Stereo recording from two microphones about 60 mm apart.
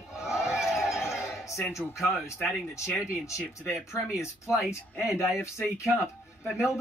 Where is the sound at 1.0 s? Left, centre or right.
Left.